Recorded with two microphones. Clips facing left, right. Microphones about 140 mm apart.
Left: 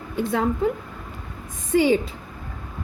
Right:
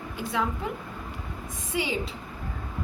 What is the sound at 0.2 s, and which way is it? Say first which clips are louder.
Speech: left 6 dB; 55° left (ahead or behind).